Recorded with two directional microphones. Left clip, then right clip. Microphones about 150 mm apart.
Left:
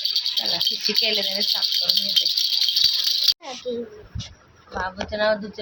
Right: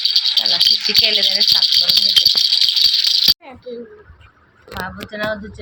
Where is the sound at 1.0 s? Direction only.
10° right (ahead or behind).